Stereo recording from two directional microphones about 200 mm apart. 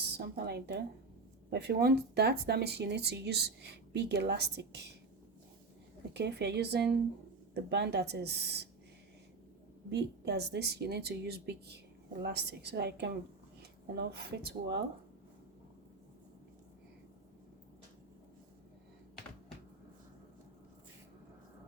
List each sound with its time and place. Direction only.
0.2 s speech: 55° right (ahead or behind)
6.1 s speech: 60° right (ahead or behind)
9.9 s speech: 55° right (ahead or behind)